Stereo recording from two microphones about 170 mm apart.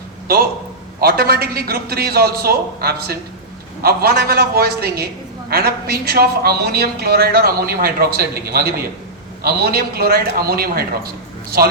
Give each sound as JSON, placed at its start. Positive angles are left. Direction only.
{"t": 1.0, "sound": "a woman's voice", "side_deg": -65}